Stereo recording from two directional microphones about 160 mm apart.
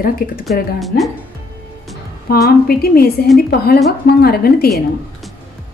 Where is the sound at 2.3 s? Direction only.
70° left (ahead or behind).